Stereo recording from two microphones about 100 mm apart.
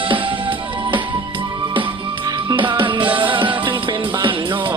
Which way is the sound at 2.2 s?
55° right (ahead or behind).